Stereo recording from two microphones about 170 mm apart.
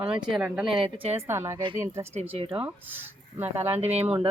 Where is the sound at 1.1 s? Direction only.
15° right (ahead or behind).